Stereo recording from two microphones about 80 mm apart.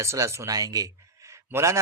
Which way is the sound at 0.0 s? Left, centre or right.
Right.